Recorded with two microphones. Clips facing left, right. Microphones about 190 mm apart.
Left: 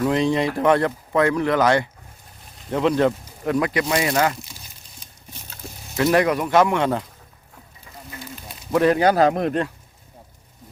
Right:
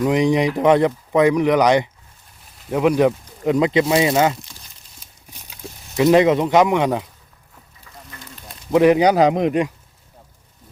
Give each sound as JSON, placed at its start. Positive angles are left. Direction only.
{"t": 0.0, "sound": "speech", "side_deg": -15}
{"t": 6.0, "sound": "speech", "side_deg": -20}
{"t": 8.2, "sound": "a sound", "side_deg": 5}
{"t": 8.7, "sound": "speech", "side_deg": -15}